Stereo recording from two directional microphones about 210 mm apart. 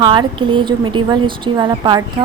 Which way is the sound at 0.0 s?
20° right (ahead or behind).